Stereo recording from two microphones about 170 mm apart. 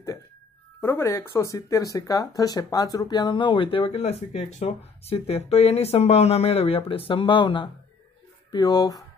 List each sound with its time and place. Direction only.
0.7 s speech: 15° left (ahead or behind)